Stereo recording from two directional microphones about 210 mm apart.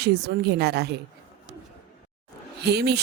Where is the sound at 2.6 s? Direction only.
50° right (ahead or behind).